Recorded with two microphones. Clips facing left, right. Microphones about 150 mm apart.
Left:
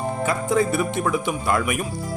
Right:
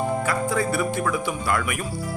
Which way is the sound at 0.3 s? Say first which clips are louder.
Left 3 dB; 20° left (ahead or behind).